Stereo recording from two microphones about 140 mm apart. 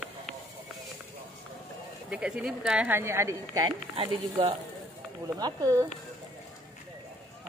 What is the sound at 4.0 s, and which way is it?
Speech, 40° right (ahead or behind).